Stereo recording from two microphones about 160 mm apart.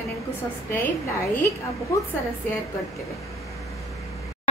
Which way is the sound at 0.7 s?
15° left (ahead or behind).